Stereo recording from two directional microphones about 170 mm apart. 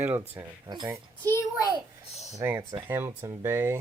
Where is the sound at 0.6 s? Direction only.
25° right (ahead or behind).